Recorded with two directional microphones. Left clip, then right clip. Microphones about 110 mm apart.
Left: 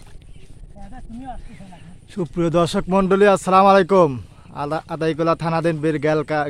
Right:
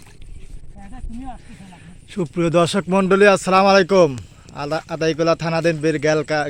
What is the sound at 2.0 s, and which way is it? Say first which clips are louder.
Speech: right 1 dB; 5° right (ahead or behind).